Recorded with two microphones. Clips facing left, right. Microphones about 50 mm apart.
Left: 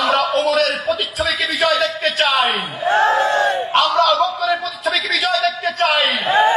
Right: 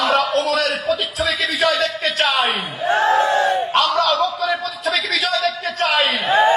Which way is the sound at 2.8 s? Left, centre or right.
Centre.